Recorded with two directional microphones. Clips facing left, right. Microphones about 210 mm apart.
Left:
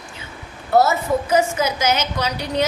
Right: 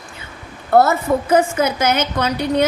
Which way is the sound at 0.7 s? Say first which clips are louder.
Right 2 dB; 55° right (ahead or behind).